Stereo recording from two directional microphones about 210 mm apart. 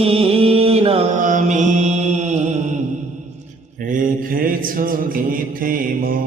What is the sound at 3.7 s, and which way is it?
Mantra, 40° right (ahead or behind).